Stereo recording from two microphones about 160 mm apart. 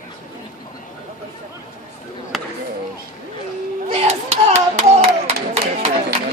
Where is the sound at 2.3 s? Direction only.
Centre (ahead or behind).